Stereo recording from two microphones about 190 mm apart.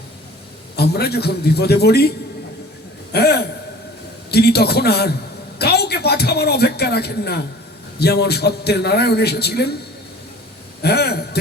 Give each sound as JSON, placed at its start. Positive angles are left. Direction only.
{"t": 0.8, "sound": "a man's voice", "side_deg": 55}
{"t": 10.8, "sound": "a man's voice", "side_deg": 60}